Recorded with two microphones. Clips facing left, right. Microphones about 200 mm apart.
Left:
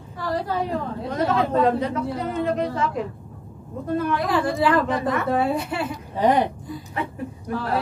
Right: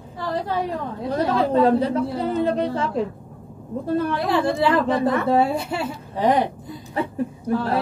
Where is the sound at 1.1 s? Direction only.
35° right (ahead or behind).